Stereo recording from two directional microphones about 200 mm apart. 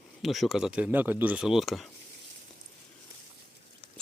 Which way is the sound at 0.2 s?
Centre (ahead or behind).